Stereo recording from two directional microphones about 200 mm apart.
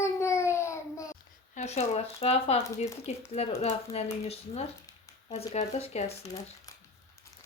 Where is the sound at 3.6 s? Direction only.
30° left (ahead or behind).